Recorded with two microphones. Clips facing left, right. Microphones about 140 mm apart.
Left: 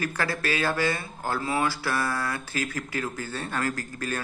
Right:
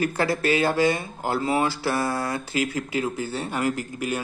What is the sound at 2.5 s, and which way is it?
Speech, 15° right (ahead or behind).